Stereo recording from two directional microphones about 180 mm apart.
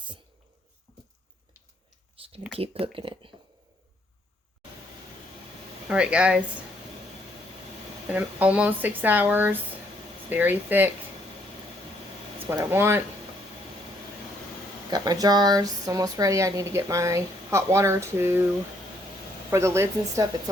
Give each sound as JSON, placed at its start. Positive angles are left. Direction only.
{"t": 2.1, "sound": "a sound", "side_deg": -30}
{"t": 2.8, "sound": "speech", "side_deg": -30}
{"t": 5.9, "sound": "speech", "side_deg": -5}
{"t": 8.1, "sound": "speech", "side_deg": -10}
{"t": 12.5, "sound": "speech", "side_deg": -15}
{"t": 14.8, "sound": "speech", "side_deg": -20}
{"t": 19.5, "sound": "speech", "side_deg": -15}